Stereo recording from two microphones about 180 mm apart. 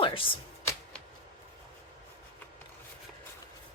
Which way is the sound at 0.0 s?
30° left (ahead or behind).